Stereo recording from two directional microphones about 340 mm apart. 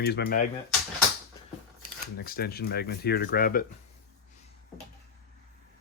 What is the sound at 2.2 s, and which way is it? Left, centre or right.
Speech, left.